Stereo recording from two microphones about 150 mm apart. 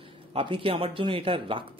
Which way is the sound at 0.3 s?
35° right (ahead or behind).